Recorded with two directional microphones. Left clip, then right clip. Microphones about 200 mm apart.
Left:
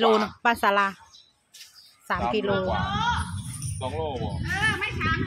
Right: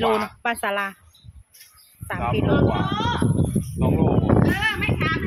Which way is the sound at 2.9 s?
55° right (ahead or behind).